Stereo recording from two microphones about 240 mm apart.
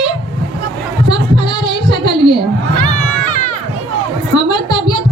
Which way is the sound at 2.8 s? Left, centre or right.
Left.